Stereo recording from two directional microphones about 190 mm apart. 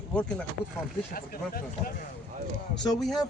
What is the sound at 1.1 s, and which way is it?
Speech, 50° left (ahead or behind).